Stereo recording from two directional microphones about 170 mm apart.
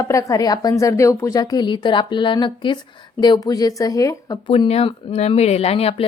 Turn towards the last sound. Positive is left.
turn(degrees=35)  # may be behind; listen again after turning